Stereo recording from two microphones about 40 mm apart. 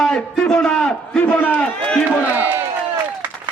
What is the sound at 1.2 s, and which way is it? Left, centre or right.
Speech, left.